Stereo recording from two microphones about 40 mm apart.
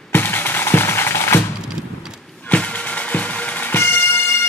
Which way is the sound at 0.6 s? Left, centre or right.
Left.